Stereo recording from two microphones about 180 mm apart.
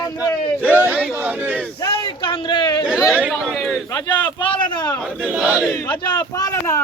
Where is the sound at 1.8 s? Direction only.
30° left (ahead or behind).